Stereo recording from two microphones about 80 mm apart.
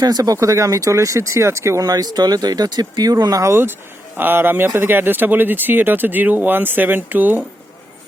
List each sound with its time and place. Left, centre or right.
0.0 s speech: right
1.8 s speech: right
3.4 s speech: right